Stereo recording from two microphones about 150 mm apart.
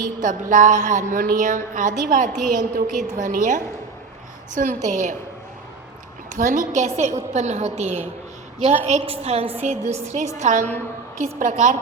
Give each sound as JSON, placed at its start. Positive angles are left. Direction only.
{"t": 0.2, "sound": "a woman's voice", "side_deg": -60}
{"t": 6.3, "sound": "a woman's voice", "side_deg": -60}